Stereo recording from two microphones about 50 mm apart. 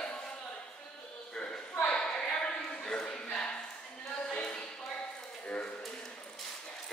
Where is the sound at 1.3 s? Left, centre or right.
Centre.